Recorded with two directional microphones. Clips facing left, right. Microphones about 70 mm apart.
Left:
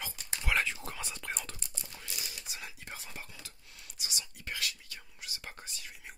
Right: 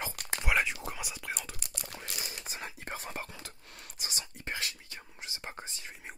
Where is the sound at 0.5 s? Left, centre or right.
Centre.